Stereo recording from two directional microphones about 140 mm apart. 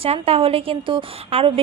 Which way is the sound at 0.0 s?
45° right (ahead or behind).